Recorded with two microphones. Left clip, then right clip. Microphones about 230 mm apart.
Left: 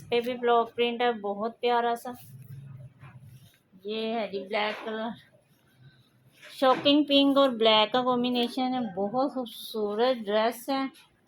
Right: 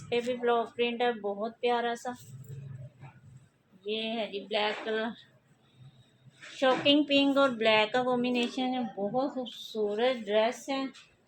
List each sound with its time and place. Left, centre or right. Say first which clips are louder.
0.1 s a woman's voice: left 4 dB; left
3.8 s a woman's voice: left 2 dB; left
6.6 s a woman's voice: left 2 dB; left